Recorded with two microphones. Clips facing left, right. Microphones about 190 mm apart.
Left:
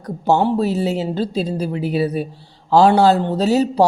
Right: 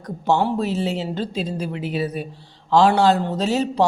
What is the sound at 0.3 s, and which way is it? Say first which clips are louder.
Speech: left 5 dB; 30° left (ahead or behind).